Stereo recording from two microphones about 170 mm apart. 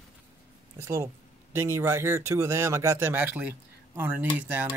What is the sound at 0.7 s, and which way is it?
Speech, 15° right (ahead or behind).